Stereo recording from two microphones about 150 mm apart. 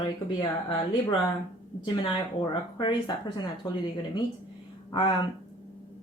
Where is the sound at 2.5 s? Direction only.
35° left (ahead or behind).